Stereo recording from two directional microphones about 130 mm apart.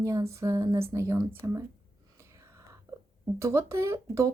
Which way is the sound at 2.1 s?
20° right (ahead or behind).